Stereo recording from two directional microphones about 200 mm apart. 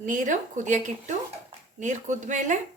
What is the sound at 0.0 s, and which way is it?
A woman's voice, 40° right (ahead or behind).